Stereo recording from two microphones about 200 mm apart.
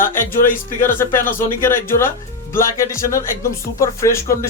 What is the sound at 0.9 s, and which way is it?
Speech, 10° left (ahead or behind).